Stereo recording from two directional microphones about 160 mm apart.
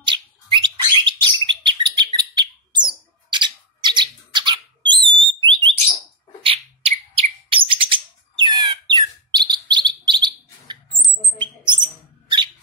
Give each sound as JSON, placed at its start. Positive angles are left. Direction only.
{"t": 0.0, "sound": "bird", "side_deg": -30}
{"t": 5.0, "sound": "alarm", "side_deg": -30}
{"t": 6.4, "sound": "bird", "side_deg": -35}
{"t": 11.6, "sound": "a sound", "side_deg": -30}